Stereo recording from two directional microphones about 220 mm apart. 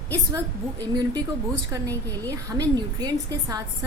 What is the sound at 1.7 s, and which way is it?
A woman's voice, 15° right (ahead or behind).